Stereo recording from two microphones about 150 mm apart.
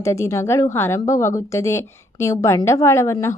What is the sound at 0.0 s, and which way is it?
A woman's voice, 20° left (ahead or behind).